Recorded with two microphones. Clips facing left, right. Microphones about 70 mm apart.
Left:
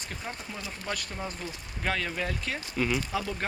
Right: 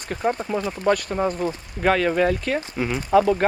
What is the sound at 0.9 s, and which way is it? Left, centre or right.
Speech, right.